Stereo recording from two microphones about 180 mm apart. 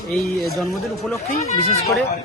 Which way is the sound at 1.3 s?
45° left (ahead or behind).